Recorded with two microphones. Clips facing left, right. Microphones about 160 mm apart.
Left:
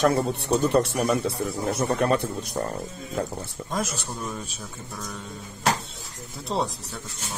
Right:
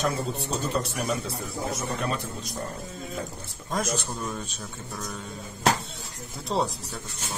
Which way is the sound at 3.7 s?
Centre (ahead or behind).